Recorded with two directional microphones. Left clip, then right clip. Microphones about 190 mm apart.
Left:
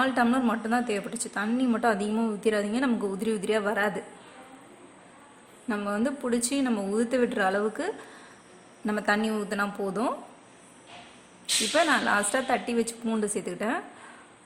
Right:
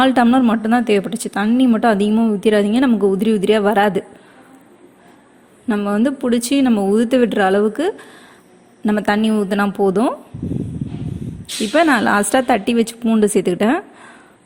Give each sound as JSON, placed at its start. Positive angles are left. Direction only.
{"t": 0.0, "sound": "speech", "side_deg": -40}
{"t": 5.6, "sound": "speech", "side_deg": -40}
{"t": 11.7, "sound": "speech", "side_deg": -40}